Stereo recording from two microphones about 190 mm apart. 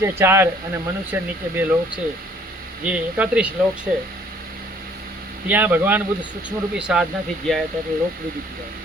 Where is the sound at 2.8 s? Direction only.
5° right (ahead or behind).